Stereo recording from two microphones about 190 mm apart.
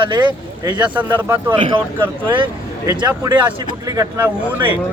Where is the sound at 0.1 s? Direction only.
25° right (ahead or behind).